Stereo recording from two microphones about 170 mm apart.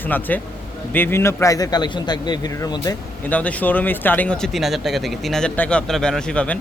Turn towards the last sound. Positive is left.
turn(degrees=5)  # may be behind; listen again after turning